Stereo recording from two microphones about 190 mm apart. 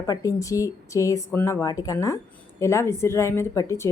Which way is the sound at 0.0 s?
15° left (ahead or behind).